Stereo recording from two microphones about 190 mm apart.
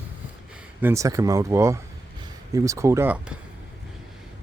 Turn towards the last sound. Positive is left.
turn(degrees=-10)  # may be behind; listen again after turning